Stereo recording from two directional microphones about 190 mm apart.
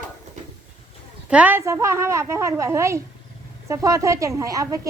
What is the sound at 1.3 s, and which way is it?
A woman's voice, 10° right (ahead or behind).